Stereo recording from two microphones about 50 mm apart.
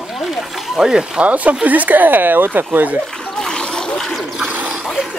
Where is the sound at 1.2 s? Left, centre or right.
Right.